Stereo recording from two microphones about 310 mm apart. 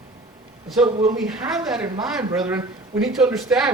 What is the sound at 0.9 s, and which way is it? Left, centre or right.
Speech, right.